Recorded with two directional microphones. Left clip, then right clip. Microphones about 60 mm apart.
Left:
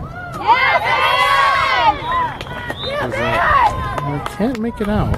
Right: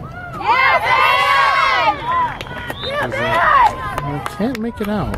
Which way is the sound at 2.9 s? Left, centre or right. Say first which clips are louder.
Right 1 dB; right.